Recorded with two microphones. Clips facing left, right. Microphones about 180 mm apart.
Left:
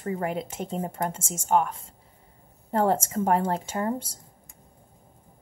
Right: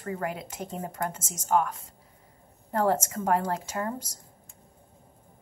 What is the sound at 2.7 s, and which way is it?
Speech, 25° left (ahead or behind).